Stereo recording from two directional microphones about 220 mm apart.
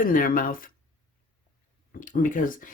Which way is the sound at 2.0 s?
35° left (ahead or behind).